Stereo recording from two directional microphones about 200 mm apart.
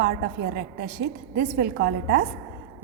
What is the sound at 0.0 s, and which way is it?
A woman's voice, 55° right (ahead or behind).